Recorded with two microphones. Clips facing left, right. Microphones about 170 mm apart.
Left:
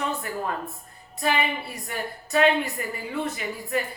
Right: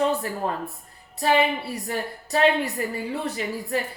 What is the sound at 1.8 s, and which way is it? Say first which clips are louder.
Speech: right 3 dB; 35° right (ahead or behind).